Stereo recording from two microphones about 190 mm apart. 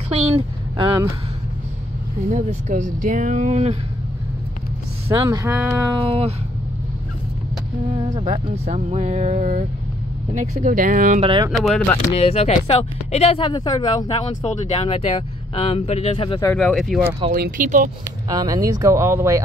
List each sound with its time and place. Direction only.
0.1 s vehicle: 30° right (ahead or behind)
2.2 s speech: 40° right (ahead or behind)
5.0 s speech: 25° right (ahead or behind)
5.5 s speech: 10° right (ahead or behind)
5.9 s speech: 30° right (ahead or behind)
7.9 s speech: 30° right (ahead or behind)
11.1 s speech: 30° right (ahead or behind)
11.6 s speech: 5° left (ahead or behind)
12.1 s speech: 30° left (ahead or behind)
14.4 s speech: 30° left (ahead or behind)
16.5 s speech: 5° left (ahead or behind)
17.3 s speech: 45° right (ahead or behind)
18.3 s speech: 20° right (ahead or behind)